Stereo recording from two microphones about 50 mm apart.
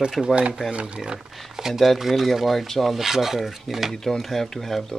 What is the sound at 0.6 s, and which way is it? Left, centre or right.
Speech, right.